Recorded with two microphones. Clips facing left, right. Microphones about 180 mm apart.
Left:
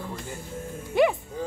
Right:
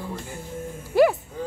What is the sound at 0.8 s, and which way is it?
Speech, 5° right (ahead or behind).